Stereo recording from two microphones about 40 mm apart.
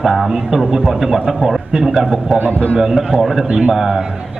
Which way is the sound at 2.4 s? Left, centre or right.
Left.